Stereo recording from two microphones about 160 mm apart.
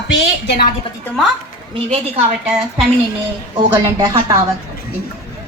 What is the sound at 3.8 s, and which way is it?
Speech, 25° right (ahead or behind).